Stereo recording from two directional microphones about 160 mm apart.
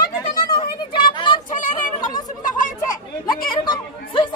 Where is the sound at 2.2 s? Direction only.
55° left (ahead or behind).